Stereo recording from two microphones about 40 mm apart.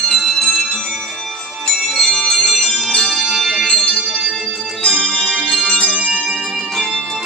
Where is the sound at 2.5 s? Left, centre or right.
Centre.